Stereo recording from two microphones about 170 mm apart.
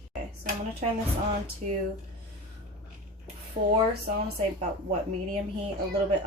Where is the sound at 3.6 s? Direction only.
30° right (ahead or behind).